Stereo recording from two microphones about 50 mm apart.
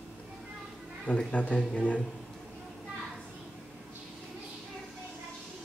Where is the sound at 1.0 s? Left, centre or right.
Left.